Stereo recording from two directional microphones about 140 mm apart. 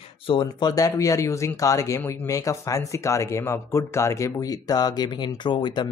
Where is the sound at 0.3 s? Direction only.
35° left (ahead or behind).